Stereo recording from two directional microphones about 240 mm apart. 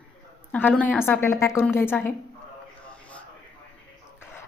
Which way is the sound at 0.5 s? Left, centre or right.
Centre.